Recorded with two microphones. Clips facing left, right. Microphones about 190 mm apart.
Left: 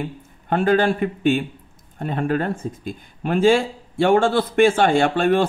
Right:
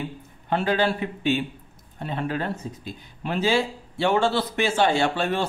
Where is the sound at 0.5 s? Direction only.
50° left (ahead or behind).